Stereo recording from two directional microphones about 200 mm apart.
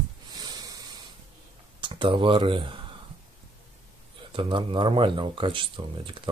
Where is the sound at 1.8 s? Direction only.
25° right (ahead or behind).